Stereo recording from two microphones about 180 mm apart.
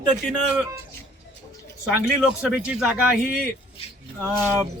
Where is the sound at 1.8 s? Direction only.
5° right (ahead or behind).